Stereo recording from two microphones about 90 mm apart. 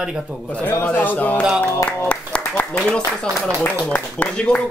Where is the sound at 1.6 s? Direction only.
20° left (ahead or behind).